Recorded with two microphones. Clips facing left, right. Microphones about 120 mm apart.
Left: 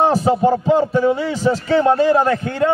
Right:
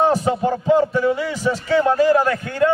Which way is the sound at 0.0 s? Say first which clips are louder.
Left 2 dB; 30° left (ahead or behind).